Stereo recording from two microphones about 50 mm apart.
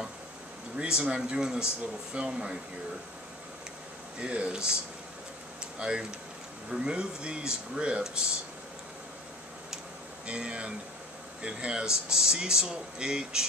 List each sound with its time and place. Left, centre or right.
0.7 s speech: centre
4.2 s speech: right
5.6 s a sound: centre
6.7 s speech: centre
10.2 s speech: right